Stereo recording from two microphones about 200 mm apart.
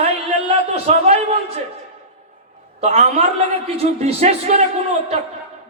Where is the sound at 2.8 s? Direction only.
35° right (ahead or behind).